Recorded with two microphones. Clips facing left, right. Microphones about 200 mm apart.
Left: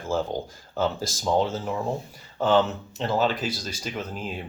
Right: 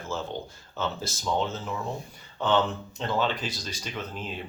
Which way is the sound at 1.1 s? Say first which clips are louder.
Left 5 dB; 10° left (ahead or behind).